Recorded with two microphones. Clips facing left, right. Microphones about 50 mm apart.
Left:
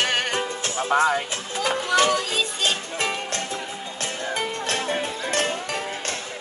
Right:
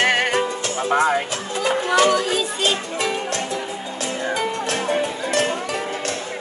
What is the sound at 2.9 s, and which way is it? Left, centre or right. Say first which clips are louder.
Music: right 3 dB; left.